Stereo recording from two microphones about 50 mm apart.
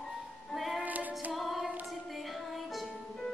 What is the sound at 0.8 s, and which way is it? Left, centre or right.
Female singing, right.